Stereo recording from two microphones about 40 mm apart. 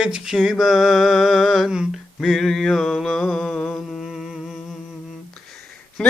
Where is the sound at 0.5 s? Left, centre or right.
Centre.